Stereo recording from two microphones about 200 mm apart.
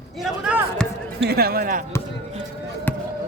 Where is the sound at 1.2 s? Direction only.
50° right (ahead or behind).